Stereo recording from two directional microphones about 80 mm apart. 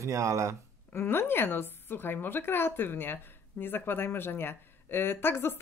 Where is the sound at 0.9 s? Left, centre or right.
Left.